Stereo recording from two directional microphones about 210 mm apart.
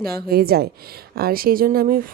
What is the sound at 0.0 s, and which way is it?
Speech, 45° right (ahead or behind).